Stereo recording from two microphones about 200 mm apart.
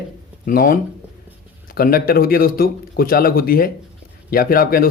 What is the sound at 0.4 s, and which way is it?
A man's voice, 45° left (ahead or behind).